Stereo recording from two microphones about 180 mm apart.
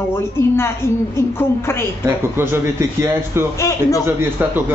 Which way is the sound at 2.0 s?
15° right (ahead or behind).